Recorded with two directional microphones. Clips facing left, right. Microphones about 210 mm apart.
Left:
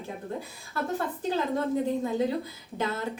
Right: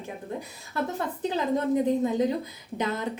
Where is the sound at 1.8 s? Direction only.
20° right (ahead or behind).